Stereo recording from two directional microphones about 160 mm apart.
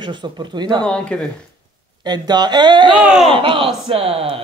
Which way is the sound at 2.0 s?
25° right (ahead or behind).